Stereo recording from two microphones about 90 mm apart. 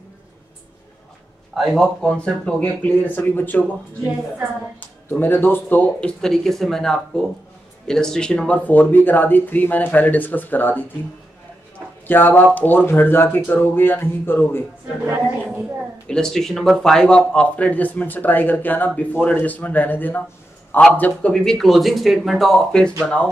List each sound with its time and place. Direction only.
1.5 s speech: 5° right (ahead or behind); by 3.7 s 20° left (ahead or behind)
4.7 s speech: 20° left (ahead or behind)
5.9 s speech: 10° left (ahead or behind)
8.6 s speech: 20° left (ahead or behind)
12.1 s speech: 20° left (ahead or behind)
16.1 s speech: 5° left (ahead or behind)
21.3 s speech: 5° left (ahead or behind)